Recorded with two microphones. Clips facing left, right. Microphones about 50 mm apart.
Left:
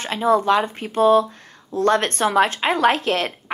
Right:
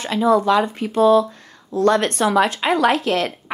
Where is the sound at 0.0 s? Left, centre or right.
Left.